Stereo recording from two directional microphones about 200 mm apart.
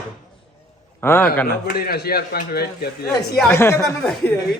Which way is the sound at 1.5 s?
50° left (ahead or behind).